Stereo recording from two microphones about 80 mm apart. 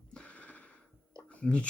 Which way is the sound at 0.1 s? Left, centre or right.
Centre.